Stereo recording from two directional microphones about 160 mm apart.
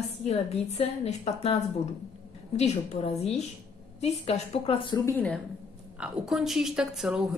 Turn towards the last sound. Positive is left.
turn(degrees=-5)  # may be behind; listen again after turning